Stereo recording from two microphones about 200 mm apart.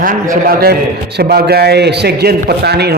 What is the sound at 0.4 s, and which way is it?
A man's voice, 50° right (ahead or behind).